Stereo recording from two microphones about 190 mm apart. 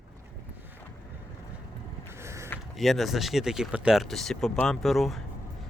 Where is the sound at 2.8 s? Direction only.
Centre (ahead or behind).